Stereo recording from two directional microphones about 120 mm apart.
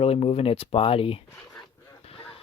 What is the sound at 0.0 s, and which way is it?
Speech, 55° left (ahead or behind).